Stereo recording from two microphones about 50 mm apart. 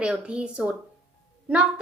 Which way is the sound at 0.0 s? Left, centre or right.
Centre.